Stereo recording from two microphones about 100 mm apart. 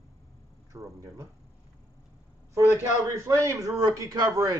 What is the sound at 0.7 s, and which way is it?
Speech, 30° right (ahead or behind).